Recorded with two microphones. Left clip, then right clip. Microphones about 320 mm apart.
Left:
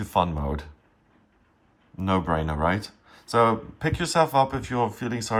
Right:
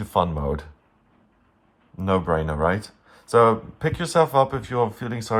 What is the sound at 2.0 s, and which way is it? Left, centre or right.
Speech, centre.